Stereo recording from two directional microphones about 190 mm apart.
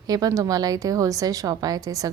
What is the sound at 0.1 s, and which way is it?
A woman's voice, 20° right (ahead or behind).